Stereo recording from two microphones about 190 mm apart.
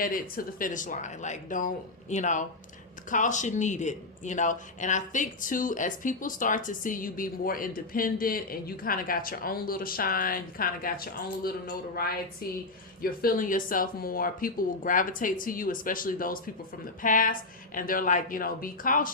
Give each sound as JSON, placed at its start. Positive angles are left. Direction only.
{"t": 0.0, "sound": "speech", "side_deg": 50}